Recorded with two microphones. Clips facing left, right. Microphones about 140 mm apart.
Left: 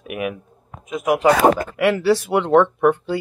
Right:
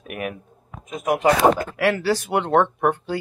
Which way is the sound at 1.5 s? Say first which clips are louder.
Left 3 dB; 25° left (ahead or behind).